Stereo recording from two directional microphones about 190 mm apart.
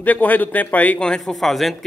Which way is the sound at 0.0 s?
10° left (ahead or behind).